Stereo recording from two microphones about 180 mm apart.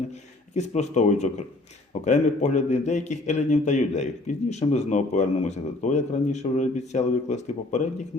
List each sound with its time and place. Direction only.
0.5 s a man's voice: 40° left (ahead or behind)